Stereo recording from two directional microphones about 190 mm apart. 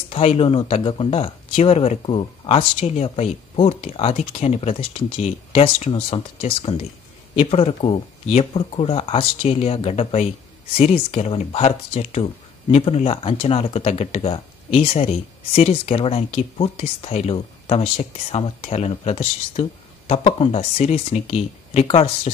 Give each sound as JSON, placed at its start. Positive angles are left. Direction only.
{"t": 0.1, "sound": "speech", "side_deg": 30}